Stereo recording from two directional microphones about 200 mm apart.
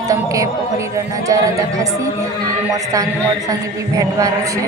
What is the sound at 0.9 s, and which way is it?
Speech, 15° right (ahead or behind).